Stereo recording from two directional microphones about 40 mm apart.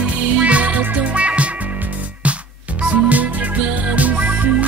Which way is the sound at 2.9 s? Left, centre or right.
Right.